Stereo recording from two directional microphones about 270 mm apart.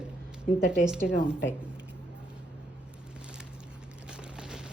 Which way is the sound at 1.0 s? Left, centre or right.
Left.